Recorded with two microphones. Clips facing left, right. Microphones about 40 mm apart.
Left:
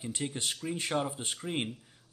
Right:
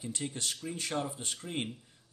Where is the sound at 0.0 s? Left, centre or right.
Left.